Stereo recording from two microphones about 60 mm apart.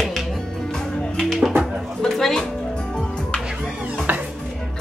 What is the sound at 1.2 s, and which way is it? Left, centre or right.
Music, centre.